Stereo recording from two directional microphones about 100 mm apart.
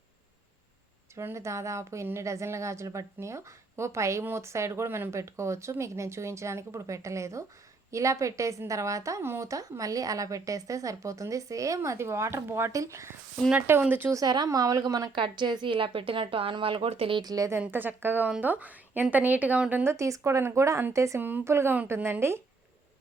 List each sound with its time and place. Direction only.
1.1 s a woman's voice: 30° right (ahead or behind)
14.1 s a woman's voice: 40° right (ahead or behind)
15.1 s a woman's voice: 55° right (ahead or behind)
17.2 s a woman's voice: 35° right (ahead or behind)
17.6 s a woman's voice: 20° right (ahead or behind)
19.8 s a woman's voice: 30° right (ahead or behind)